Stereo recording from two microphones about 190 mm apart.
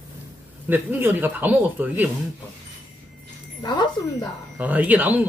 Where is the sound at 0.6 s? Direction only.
10° right (ahead or behind).